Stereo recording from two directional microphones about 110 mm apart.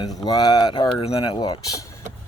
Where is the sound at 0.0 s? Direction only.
35° left (ahead or behind).